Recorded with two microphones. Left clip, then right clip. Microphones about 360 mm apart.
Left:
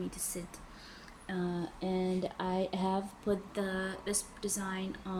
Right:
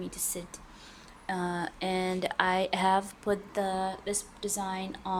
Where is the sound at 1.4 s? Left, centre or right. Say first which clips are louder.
Right 4 dB; right.